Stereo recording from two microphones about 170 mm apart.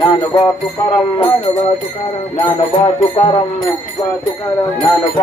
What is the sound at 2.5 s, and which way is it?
Music, 30° left (ahead or behind).